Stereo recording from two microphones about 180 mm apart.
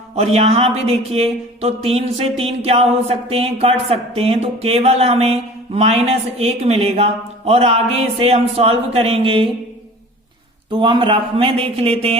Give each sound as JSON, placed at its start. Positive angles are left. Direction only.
{"t": 0.2, "sound": "speech", "side_deg": -35}
{"t": 10.7, "sound": "speech", "side_deg": -25}